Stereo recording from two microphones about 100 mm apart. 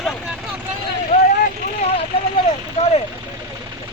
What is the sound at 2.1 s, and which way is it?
Speech, 70° left (ahead or behind).